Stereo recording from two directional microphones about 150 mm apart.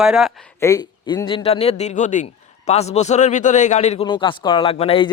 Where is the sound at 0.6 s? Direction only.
25° left (ahead or behind); by 4.0 s 50° left (ahead or behind).